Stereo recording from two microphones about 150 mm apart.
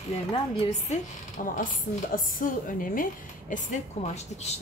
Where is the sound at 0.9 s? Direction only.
65° left (ahead or behind); by 4.6 s 50° left (ahead or behind).